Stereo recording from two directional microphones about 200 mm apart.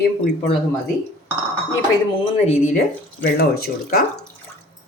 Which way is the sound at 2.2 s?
35° left (ahead or behind).